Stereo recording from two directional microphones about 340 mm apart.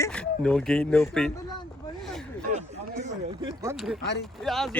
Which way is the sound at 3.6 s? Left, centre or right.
Centre.